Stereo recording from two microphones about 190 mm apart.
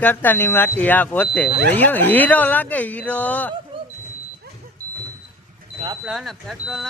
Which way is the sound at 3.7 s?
30° right (ahead or behind).